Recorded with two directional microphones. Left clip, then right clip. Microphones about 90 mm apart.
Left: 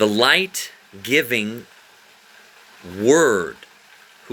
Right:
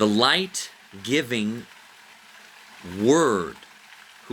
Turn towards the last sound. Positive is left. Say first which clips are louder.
# left 4 dB
turn(degrees=-30)  # may be behind; listen again after turning